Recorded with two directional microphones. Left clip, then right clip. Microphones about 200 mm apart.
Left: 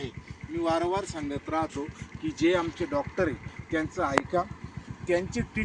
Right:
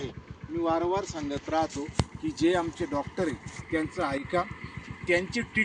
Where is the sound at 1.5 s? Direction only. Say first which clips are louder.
Right 3 dB; 5° right (ahead or behind).